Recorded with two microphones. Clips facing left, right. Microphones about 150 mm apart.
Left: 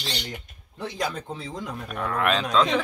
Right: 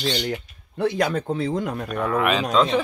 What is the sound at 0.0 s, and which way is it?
Speech, 65° right (ahead or behind).